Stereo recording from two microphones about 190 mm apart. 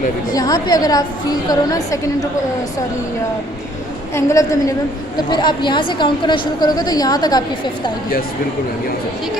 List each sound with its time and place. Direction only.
0.3 s a woman's voice: 20° left (ahead or behind)
4.1 s a woman's voice: 15° left (ahead or behind)